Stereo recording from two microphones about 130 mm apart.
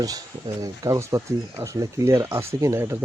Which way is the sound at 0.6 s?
25° right (ahead or behind).